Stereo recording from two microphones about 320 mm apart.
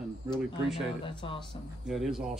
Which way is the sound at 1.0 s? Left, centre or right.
Centre.